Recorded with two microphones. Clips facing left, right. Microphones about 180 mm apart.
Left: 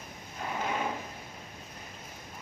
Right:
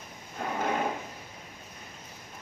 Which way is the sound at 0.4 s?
50° right (ahead or behind).